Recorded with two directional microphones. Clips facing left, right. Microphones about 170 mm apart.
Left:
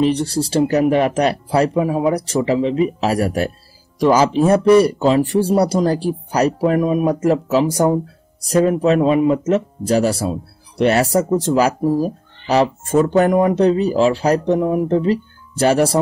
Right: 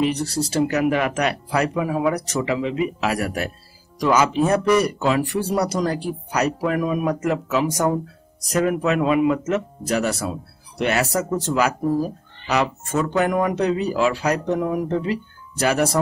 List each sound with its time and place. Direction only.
0.0 s speech: 30° left (ahead or behind)